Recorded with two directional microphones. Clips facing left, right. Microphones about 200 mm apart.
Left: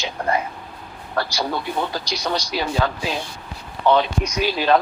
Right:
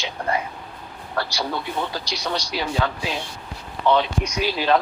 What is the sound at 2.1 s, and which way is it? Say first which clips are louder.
Speech: left 3 dB; 45° left (ahead or behind).